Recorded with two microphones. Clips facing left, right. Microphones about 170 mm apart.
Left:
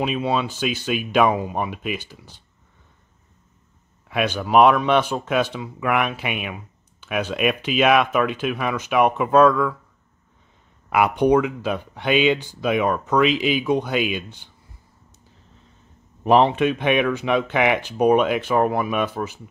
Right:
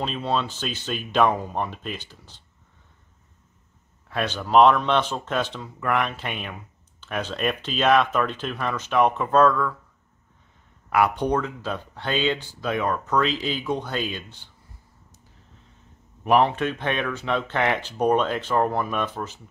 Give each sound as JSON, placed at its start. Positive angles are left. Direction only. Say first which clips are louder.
{"t": 0.0, "sound": "speech", "louder": "left 4 dB", "side_deg": 10}
{"t": 4.1, "sound": "speech", "louder": "left 2 dB", "side_deg": 10}
{"t": 10.9, "sound": "speech", "louder": "left 4 dB", "side_deg": 15}
{"t": 16.3, "sound": "speech", "louder": "left 4 dB", "side_deg": 20}